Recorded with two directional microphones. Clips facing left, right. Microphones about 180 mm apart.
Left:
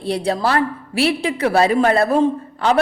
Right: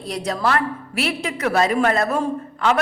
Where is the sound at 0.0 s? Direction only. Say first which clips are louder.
Left 4 dB; 30° left (ahead or behind).